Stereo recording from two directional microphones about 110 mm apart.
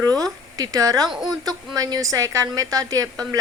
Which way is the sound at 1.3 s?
35° right (ahead or behind).